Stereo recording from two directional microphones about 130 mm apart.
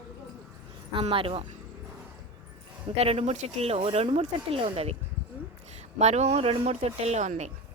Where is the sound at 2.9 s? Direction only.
50° right (ahead or behind).